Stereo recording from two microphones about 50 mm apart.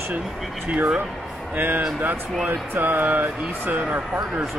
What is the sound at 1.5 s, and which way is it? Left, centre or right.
Speech, right.